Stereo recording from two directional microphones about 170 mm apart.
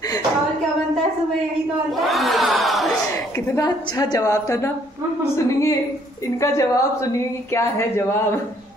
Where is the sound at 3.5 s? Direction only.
20° left (ahead or behind).